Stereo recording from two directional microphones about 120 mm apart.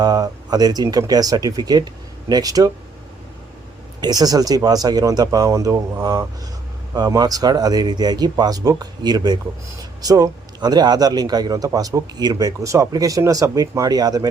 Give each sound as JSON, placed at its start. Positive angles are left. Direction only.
{"t": 0.0, "sound": "a man's voice", "side_deg": -30}
{"t": 4.0, "sound": "a man's voice", "side_deg": -35}